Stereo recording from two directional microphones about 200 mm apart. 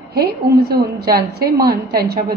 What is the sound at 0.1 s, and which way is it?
A woman's voice, 50° right (ahead or behind).